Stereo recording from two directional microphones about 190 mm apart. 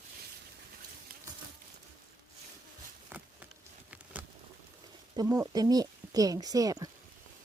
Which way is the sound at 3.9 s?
5° right (ahead or behind).